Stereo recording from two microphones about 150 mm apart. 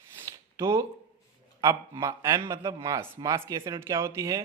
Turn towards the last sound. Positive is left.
turn(degrees=-20)  # may be behind; listen again after turning